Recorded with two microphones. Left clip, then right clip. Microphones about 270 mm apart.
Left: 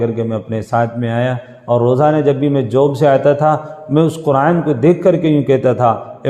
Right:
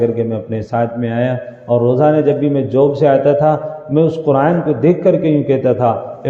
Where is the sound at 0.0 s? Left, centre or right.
Left.